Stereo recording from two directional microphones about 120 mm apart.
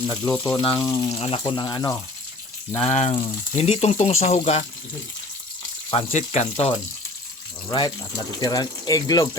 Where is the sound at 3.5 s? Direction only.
60° left (ahead or behind).